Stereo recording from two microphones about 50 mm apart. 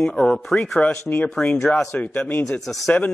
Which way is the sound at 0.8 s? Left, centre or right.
Left.